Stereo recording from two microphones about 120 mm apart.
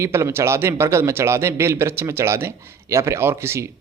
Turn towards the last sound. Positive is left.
turn(degrees=-20)  # may be behind; listen again after turning